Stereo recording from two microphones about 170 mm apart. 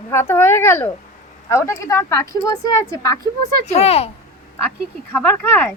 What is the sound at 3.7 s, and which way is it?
Speech, 40° left (ahead or behind).